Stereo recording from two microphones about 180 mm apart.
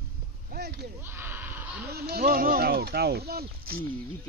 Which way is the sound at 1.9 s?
60° right (ahead or behind).